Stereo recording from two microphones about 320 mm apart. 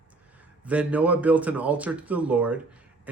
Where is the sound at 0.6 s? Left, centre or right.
Centre.